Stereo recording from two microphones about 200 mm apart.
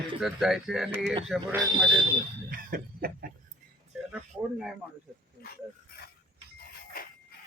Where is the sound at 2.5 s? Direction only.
50° right (ahead or behind).